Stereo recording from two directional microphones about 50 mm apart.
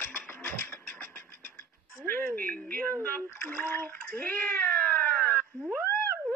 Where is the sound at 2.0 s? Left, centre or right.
Left.